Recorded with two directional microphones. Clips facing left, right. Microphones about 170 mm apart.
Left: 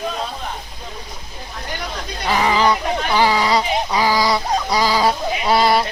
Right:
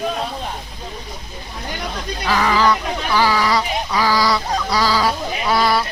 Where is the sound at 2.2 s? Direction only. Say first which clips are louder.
Even; 20° left (ahead or behind).